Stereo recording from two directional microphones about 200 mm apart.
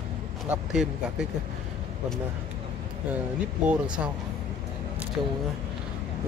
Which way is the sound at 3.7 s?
5° right (ahead or behind).